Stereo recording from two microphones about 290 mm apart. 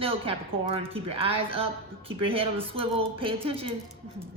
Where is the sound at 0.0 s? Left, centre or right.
Centre.